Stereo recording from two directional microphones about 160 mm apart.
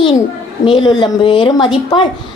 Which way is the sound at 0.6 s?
30° left (ahead or behind).